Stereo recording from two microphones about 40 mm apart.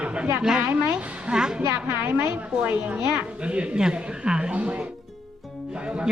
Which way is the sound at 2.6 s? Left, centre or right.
Right.